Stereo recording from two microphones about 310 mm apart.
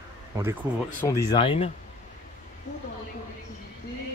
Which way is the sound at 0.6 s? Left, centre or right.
Centre.